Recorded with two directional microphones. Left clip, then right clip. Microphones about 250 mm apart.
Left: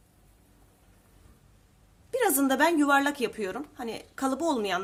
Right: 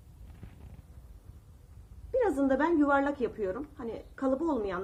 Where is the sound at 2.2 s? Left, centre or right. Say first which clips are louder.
Left 3 dB; left.